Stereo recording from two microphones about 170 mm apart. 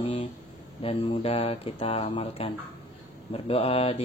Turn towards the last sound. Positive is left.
turn(degrees=35)  # may be behind; listen again after turning